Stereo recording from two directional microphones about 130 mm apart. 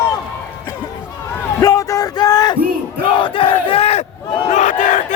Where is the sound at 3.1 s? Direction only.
40° left (ahead or behind); by 5.1 s 75° left (ahead or behind).